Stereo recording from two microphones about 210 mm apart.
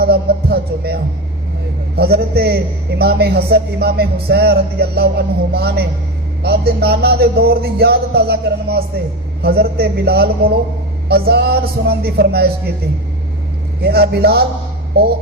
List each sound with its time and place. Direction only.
0.0 s music: 50° right (ahead or behind)
2.0 s music: 50° right (ahead or behind)
13.8 s music: 50° right (ahead or behind)